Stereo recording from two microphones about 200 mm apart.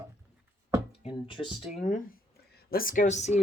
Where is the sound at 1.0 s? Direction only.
25° left (ahead or behind).